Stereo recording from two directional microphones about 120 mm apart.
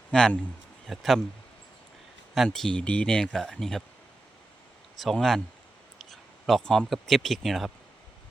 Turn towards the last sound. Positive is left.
turn(degrees=0)  # may be behind; listen again after turning